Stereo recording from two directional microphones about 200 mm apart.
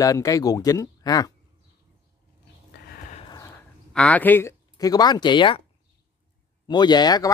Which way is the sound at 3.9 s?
5° left (ahead or behind).